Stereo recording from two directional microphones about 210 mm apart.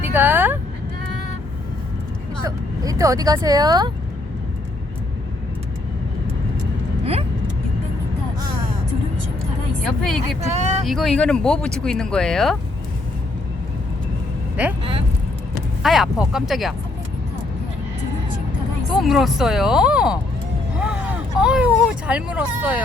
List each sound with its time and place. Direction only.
0.1 s speech: 10° right (ahead or behind)
2.4 s speech: 15° right (ahead or behind)
7.0 s vehicle: 30° right (ahead or behind)
9.8 s speech: centre (ahead or behind)
10.4 s speech: 35° right (ahead or behind)
10.8 s speech: centre (ahead or behind)
15.8 s speech: centre (ahead or behind)
18.9 s speech: centre (ahead or behind)